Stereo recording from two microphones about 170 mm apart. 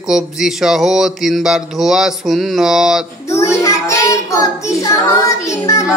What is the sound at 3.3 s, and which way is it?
Child singing, 15° left (ahead or behind).